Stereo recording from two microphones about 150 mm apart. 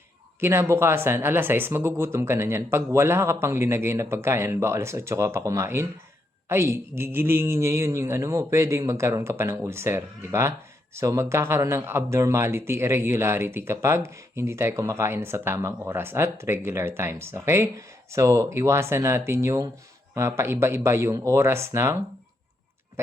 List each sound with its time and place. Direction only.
0.3 s speech: 15° right (ahead or behind)